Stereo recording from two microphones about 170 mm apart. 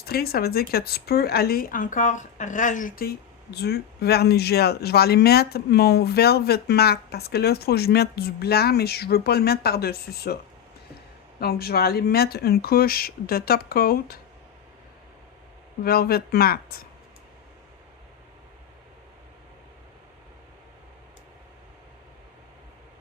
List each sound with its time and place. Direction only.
0.0 s speech: 65° left (ahead or behind)
11.3 s speech: 65° left (ahead or behind)
15.8 s speech: 65° left (ahead or behind)